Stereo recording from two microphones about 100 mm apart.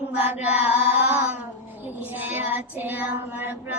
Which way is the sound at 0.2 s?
15° right (ahead or behind).